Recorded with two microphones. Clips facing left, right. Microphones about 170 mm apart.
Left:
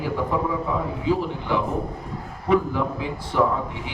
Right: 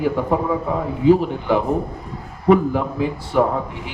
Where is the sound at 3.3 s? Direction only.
55° right (ahead or behind).